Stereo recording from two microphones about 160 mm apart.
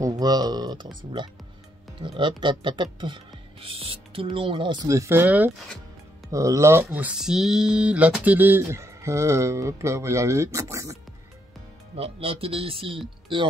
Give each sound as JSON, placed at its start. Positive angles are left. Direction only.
{"t": 0.0, "sound": "speech", "side_deg": -25}
{"t": 2.0, "sound": "speech", "side_deg": -30}
{"t": 4.8, "sound": "speech", "side_deg": -20}
{"t": 12.0, "sound": "speech", "side_deg": -40}